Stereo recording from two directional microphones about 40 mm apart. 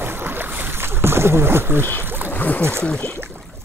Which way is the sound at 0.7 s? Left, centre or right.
Right.